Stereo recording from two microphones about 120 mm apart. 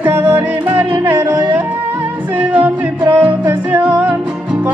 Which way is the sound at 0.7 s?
25° right (ahead or behind).